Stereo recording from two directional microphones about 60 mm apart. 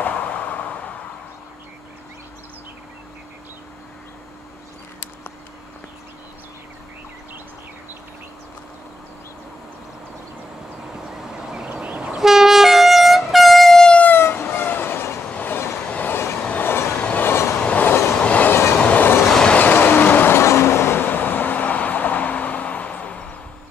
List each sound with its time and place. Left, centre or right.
0.0 s a sound: left
11.5 s vehicle: centre
12.2 s vehicle: centre
14.1 s train: left
16.6 s train: left
17.0 s train: left
17.3 s train: left
17.6 s train: left
19.3 s train: centre
19.6 s train: left
20.3 s vehicle: left